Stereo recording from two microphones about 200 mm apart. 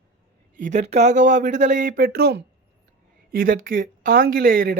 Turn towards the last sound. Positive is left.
turn(degrees=-45)  # may be behind; listen again after turning